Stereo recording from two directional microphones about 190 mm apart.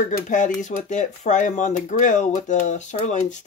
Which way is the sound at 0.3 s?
40° left (ahead or behind).